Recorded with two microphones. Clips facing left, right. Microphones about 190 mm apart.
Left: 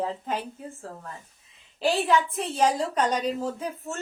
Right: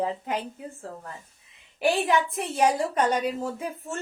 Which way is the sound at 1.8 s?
15° right (ahead or behind).